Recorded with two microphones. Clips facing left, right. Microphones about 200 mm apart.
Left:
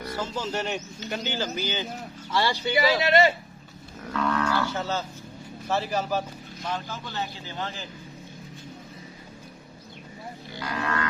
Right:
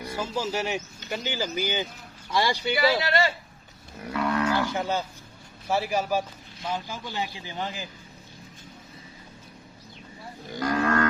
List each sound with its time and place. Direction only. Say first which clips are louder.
0.0 s speech: right 1 dB; 10° right (ahead or behind)
3.0 s speech: left 5 dB; 20° left (ahead or behind)
4.1 s livestock: right 1 dB; 10° right (ahead or behind)
5.6 s speech: right 1 dB; 10° right (ahead or behind)
10.5 s livestock: right 6 dB; 45° right (ahead or behind)